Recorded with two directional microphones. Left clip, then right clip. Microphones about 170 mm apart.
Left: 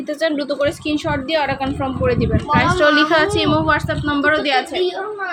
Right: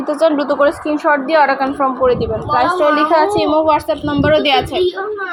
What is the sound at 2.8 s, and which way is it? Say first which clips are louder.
Speech: right 1 dB; 25° left (ahead or behind).